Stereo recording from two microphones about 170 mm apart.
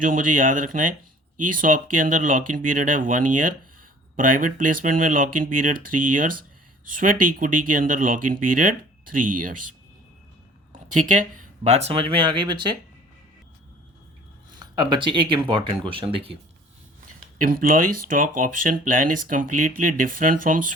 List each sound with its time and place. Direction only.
0.0 s speech: 50° right (ahead or behind)
10.7 s speech: 45° right (ahead or behind); by 12.7 s 25° right (ahead or behind)
14.6 s speech: 25° right (ahead or behind)
17.4 s speech: 55° right (ahead or behind)